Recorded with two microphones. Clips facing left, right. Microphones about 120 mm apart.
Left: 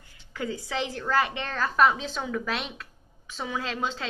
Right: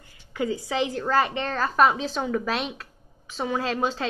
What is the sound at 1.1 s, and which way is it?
Speech, 40° right (ahead or behind).